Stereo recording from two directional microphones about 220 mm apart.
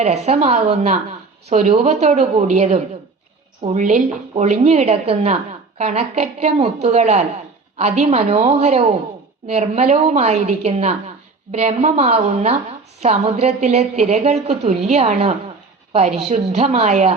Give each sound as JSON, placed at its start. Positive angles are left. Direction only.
{"t": 0.0, "sound": "a woman's voice", "side_deg": -30}